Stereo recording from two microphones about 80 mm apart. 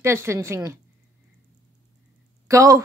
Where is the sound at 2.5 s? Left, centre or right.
Right.